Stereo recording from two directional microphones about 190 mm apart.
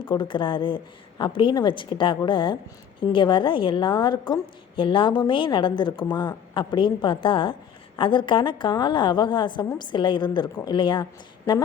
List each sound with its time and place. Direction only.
0.0 s a woman's voice: 25° left (ahead or behind)